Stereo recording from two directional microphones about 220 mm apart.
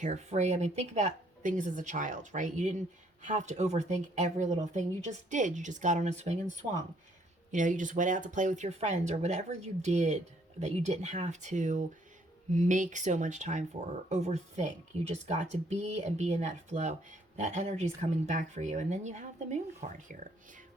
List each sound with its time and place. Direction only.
0.0 s speech: 30° right (ahead or behind)